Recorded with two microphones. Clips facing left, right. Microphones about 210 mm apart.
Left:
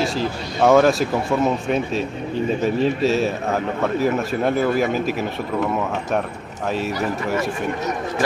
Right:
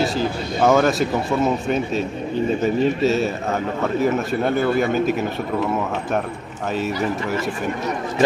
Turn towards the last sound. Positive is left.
turn(degrees=0)  # may be behind; listen again after turning